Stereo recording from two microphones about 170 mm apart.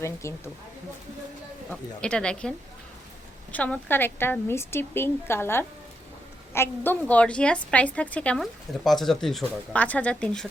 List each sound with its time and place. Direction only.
0.0 s speech: 15° left (ahead or behind)
1.7 s speech: 5° left (ahead or behind)
3.5 s speech: 10° left (ahead or behind)